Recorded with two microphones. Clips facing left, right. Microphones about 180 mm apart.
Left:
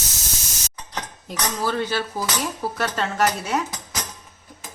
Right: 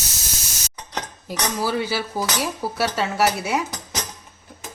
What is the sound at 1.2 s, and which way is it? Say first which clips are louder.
Cutlery: right 1 dB; 10° right (ahead or behind).